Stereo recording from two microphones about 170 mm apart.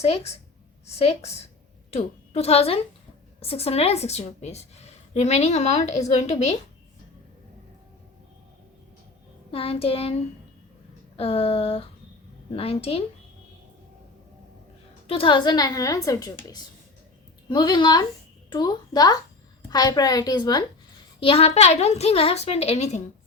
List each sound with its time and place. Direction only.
0.0 s a woman's voice: 40° left (ahead or behind)
9.5 s a woman's voice: 35° left (ahead or behind)
11.2 s a woman's voice: 35° left (ahead or behind)
15.0 s a woman's voice: 30° left (ahead or behind)
17.5 s a woman's voice: 25° left (ahead or behind)